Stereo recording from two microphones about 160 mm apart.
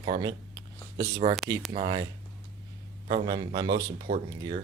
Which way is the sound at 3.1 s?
25° right (ahead or behind).